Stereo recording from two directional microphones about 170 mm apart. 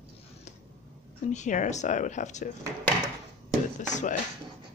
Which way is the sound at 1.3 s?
45° left (ahead or behind).